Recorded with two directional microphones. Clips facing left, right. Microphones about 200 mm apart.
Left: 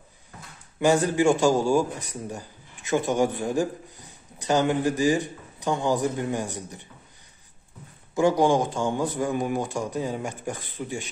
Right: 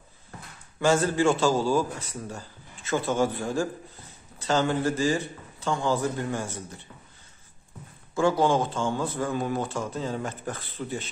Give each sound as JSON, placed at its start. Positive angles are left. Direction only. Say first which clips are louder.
{"t": 0.7, "sound": "a man's voice", "louder": "left 2 dB", "side_deg": 15}
{"t": 8.1, "sound": "speech", "louder": "left 2 dB", "side_deg": 15}